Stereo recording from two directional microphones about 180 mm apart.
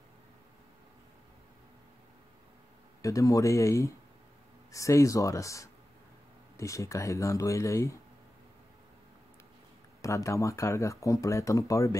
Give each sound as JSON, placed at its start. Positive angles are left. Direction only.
{"t": 3.0, "sound": "speech", "side_deg": 15}
{"t": 10.0, "sound": "speech", "side_deg": 15}